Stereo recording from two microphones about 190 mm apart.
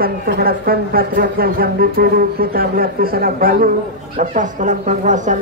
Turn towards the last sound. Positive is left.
turn(degrees=-40)  # may be behind; listen again after turning